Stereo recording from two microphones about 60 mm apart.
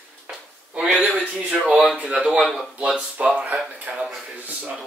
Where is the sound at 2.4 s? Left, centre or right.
Centre.